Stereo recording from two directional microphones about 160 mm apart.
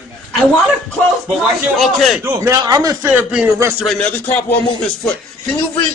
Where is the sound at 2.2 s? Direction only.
20° right (ahead or behind).